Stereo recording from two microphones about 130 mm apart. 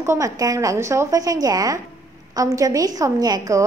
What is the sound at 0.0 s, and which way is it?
A woman's voice, 20° right (ahead or behind).